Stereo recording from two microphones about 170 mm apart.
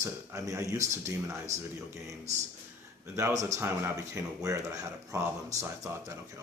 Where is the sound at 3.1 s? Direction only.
15° right (ahead or behind).